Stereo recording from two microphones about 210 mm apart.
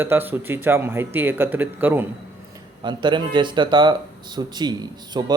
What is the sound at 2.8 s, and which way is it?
Speech, 20° right (ahead or behind).